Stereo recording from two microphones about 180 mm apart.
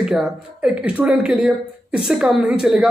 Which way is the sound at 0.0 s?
5° right (ahead or behind).